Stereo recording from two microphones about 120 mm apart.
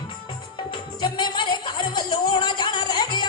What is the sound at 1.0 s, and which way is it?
Music, 40° left (ahead or behind).